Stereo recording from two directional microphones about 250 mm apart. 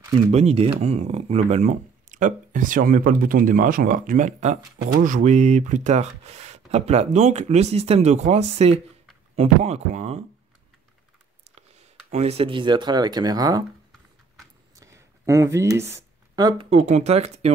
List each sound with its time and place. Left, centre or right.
0.3 s speech: right
12.1 s speech: right
14.8 s a sound: centre
16.3 s speech: centre